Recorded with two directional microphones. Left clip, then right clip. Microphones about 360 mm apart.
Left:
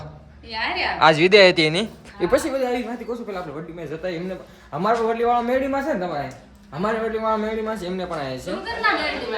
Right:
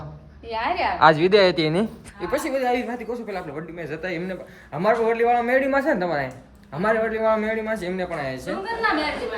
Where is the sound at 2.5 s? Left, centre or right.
Centre.